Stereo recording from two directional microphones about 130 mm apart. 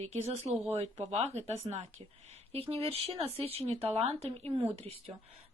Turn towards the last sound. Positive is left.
turn(degrees=-50)  # may be behind; listen again after turning